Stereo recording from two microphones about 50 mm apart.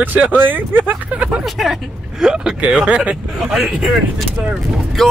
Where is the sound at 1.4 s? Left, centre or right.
Centre.